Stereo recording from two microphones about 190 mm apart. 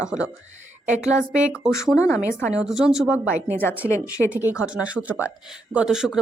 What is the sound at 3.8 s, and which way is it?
Speech, 15° left (ahead or behind).